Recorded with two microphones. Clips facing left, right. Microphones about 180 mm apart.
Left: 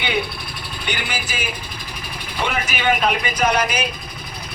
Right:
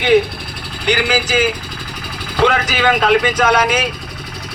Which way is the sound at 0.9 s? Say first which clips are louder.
Right 11 dB; 90° right.